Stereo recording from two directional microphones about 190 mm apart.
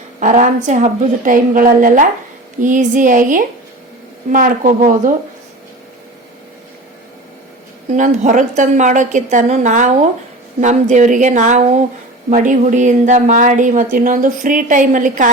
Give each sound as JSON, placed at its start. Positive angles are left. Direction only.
{"t": 0.2, "sound": "a woman's voice", "side_deg": -40}
{"t": 7.9, "sound": "a woman's voice", "side_deg": -40}